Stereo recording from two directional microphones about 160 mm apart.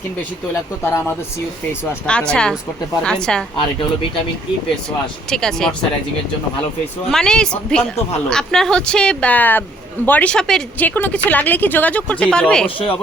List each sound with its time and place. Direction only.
0.8 s a woman's voice: 15° left (ahead or behind)
5.3 s speech: 5° left (ahead or behind)
7.1 s a woman's voice: 5° left (ahead or behind)
12.6 s speech: 35° left (ahead or behind)